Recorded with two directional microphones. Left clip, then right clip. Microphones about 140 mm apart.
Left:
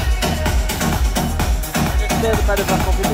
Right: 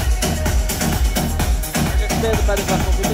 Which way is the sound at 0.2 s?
15° right (ahead or behind).